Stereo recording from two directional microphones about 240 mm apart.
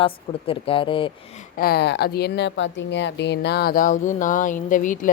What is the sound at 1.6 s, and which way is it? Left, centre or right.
Speech, left.